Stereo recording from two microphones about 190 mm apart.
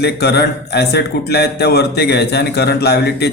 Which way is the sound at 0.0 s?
60° left (ahead or behind).